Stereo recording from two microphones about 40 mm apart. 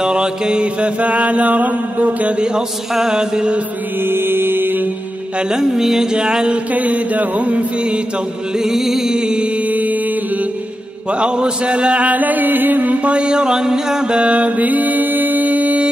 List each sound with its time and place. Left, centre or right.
0.0 s mantra: centre; by 2.3 s right
2.3 s mantra: right
2.9 s music: centre
4.0 s mantra: right
5.5 s music: centre
6.1 s mantra: right
6.7 s mantra: right
8.5 s music: centre
9.6 s music: right
11.1 s mantra: right
12.1 s mantra: right
13.1 s mantra: right
14.3 s mantra: right